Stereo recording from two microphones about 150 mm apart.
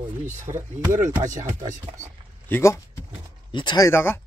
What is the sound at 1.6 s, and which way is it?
Speech, 60° right (ahead or behind).